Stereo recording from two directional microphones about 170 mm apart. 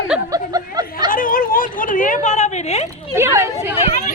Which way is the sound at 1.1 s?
55° left (ahead or behind).